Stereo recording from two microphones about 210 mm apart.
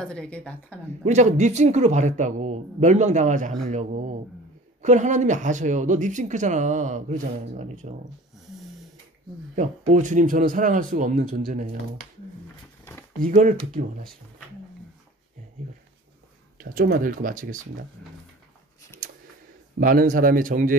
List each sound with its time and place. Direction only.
0.0 s speech: 5° left (ahead or behind)
1.0 s speech: 35° right (ahead or behind)
4.8 s speech: 35° right (ahead or behind)
9.6 s speech: 35° right (ahead or behind)
12.9 s a sound: 10° left (ahead or behind)
13.2 s speech: 40° right (ahead or behind)
16.5 s speech: 40° right (ahead or behind)
19.8 s speech: 40° right (ahead or behind)